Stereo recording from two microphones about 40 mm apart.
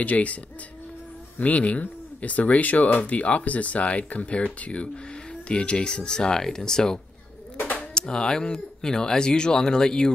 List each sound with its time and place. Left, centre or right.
0.0 s speech: left
1.4 s speech: left; by 10.1 s centre